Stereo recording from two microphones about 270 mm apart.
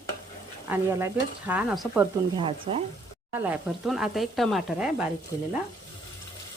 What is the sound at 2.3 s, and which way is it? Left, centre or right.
Speech, centre.